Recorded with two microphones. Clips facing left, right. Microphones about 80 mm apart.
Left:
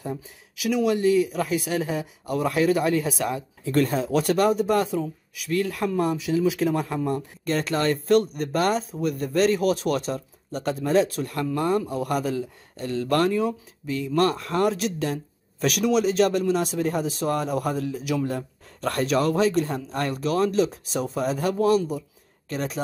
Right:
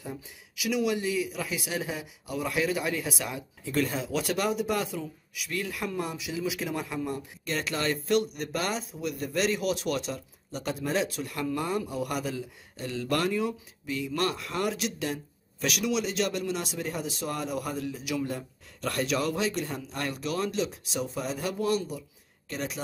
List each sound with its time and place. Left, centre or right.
0.6 s speech: left